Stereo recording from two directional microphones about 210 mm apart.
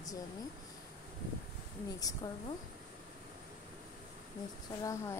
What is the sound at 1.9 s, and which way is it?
Speech, 15° left (ahead or behind).